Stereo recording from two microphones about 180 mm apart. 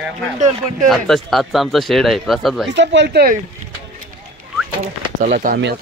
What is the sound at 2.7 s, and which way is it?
Speech, 75° right (ahead or behind).